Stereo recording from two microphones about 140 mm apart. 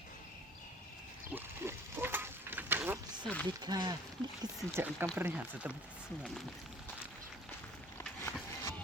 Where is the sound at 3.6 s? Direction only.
30° right (ahead or behind).